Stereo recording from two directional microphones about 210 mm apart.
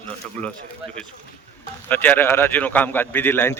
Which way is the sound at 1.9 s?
10° left (ahead or behind).